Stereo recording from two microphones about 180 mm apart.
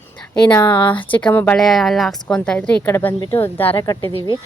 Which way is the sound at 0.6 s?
25° left (ahead or behind).